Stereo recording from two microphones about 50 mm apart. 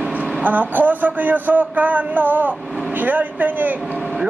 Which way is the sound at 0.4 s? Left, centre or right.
Right.